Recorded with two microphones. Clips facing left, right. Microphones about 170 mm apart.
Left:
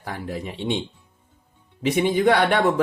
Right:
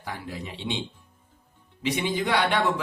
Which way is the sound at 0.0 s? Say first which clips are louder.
Left 5 dB; 50° left (ahead or behind).